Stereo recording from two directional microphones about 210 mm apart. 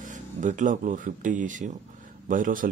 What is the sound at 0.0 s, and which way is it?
Speech, 35° right (ahead or behind).